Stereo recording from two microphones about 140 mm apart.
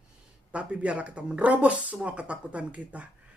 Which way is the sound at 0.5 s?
10° right (ahead or behind).